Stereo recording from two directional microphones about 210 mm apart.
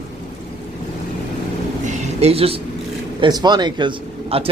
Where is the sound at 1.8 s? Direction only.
35° right (ahead or behind).